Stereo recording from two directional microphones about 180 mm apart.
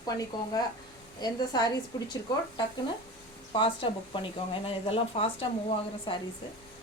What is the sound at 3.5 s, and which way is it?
Speech, 30° left (ahead or behind).